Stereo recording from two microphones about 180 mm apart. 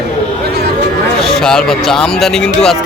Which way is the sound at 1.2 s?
5° left (ahead or behind).